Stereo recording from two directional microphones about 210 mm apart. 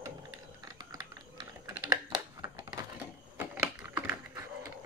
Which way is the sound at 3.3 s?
10° right (ahead or behind).